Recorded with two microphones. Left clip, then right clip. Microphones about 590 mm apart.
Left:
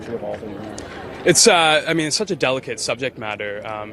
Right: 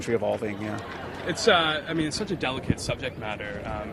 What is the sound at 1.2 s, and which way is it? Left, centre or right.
Speech, left.